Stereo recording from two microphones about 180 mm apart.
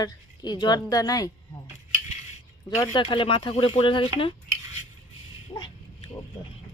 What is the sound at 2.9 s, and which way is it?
Speech, 30° left (ahead or behind).